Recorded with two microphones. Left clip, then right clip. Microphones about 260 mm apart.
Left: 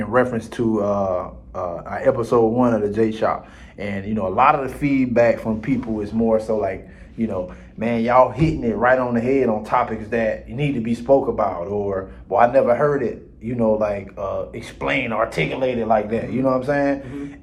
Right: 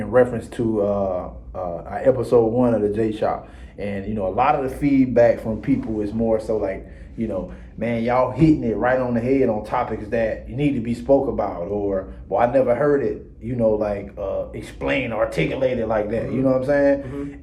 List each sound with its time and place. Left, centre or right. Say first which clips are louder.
0.1 s a man's voice: right 2 dB; centre
7.8 s a man's voice: left 4 dB; centre